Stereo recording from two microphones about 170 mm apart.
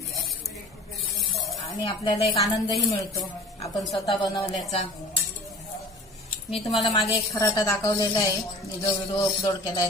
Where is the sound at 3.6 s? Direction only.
30° left (ahead or behind).